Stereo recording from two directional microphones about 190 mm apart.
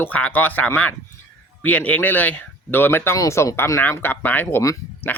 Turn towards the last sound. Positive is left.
turn(degrees=15)  # may be behind; listen again after turning